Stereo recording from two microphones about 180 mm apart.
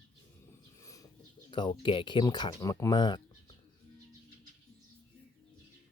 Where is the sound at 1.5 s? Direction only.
25° left (ahead or behind).